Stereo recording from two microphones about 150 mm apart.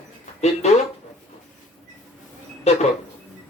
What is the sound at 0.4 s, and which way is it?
Speech, 45° left (ahead or behind).